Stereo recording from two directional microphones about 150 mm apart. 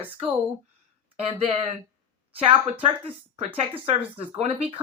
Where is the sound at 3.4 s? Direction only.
40° right (ahead or behind).